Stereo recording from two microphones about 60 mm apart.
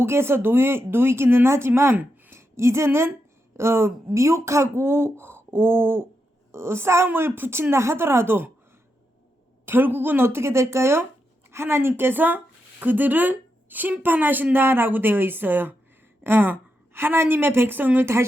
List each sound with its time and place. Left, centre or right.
0.0 s a woman's voice: right
9.6 s a woman's voice: right
18.0 s speech: right